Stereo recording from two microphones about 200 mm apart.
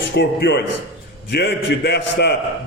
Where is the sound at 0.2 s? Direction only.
60° left (ahead or behind).